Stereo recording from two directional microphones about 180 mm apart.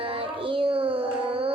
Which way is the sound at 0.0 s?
30° right (ahead or behind).